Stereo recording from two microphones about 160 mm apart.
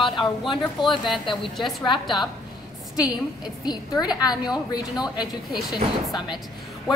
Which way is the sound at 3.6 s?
25° left (ahead or behind).